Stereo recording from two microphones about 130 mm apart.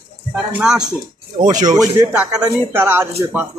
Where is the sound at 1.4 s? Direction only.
90° right.